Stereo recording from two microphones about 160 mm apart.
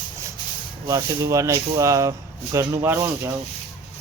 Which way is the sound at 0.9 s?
20° right (ahead or behind).